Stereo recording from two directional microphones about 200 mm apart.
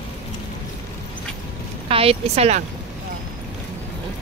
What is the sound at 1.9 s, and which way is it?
Speech, 30° right (ahead or behind).